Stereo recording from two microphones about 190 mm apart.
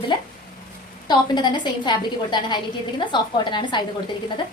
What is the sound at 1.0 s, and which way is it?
A woman's voice, 25° left (ahead or behind).